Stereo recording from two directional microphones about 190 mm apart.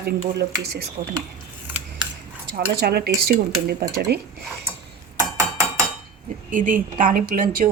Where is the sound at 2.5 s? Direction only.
55° right (ahead or behind).